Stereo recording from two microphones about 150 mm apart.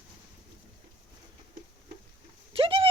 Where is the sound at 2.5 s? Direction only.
40° right (ahead or behind).